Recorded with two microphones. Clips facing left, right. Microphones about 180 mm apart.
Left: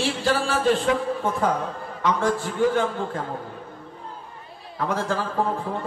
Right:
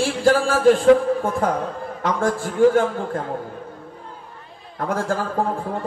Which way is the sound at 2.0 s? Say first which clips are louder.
Right 1 dB; 50° right (ahead or behind).